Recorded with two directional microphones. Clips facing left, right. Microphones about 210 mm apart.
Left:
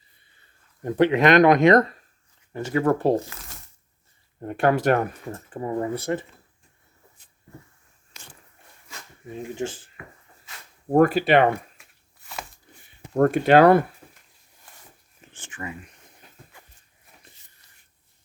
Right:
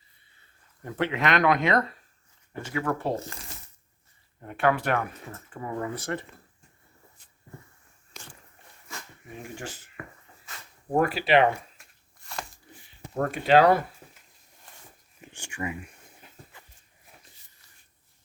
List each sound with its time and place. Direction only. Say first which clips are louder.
0.9 s speech: left 9 dB; 40° left (ahead or behind)
3.5 s a sound: right 1 dB; centre (ahead or behind)
4.4 s speech: left 5 dB; 40° left (ahead or behind)
10.9 s speech: left 5 dB; 45° left (ahead or behind)
11.8 s a sound: left 1 dB; 5° left (ahead or behind)
13.1 s speech: left 5 dB; 50° left (ahead or behind)
15.2 s speech: right 3 dB; 15° right (ahead or behind)